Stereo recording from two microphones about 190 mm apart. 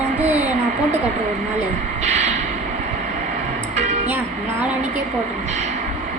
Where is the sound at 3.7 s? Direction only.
40° right (ahead or behind).